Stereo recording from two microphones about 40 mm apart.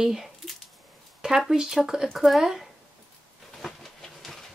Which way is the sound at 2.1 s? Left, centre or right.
Centre.